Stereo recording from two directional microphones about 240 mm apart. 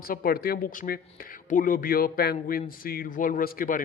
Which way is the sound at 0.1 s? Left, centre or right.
Left.